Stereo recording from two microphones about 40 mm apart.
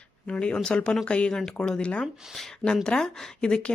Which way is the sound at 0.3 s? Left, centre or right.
Left.